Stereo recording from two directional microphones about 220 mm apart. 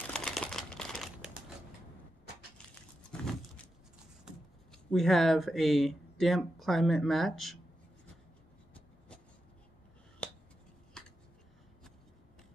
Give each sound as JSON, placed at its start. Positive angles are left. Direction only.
{"t": 0.0, "sound": "crumpling", "side_deg": 0}
{"t": 3.1, "sound": "vehicle", "side_deg": 5}
{"t": 4.9, "sound": "speech", "side_deg": 0}
{"t": 10.2, "sound": "finger snapping", "side_deg": 5}